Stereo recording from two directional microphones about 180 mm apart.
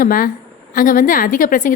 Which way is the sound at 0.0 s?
50° left (ahead or behind).